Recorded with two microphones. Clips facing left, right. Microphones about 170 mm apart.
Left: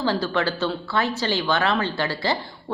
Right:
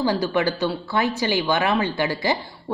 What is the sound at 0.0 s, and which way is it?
A woman's voice, 15° right (ahead or behind).